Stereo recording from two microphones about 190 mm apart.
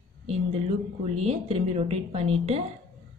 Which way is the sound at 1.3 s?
30° right (ahead or behind).